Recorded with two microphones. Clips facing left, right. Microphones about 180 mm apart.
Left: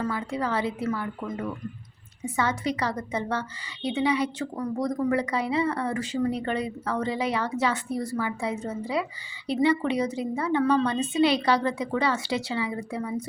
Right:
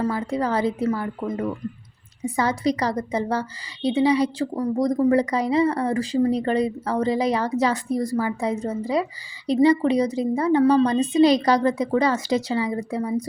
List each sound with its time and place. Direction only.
0.0 s speech: 40° right (ahead or behind)